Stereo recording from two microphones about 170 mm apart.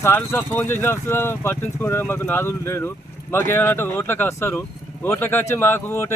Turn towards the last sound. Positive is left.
turn(degrees=15)  # may be behind; listen again after turning